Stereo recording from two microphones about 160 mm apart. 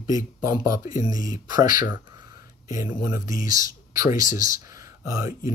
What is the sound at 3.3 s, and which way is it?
Speech, 55° left (ahead or behind).